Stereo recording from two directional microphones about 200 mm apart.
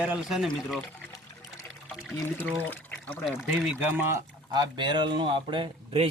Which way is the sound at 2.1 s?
10° left (ahead or behind).